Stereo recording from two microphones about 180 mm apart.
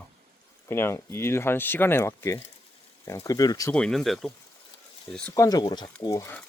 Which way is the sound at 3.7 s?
5° left (ahead or behind).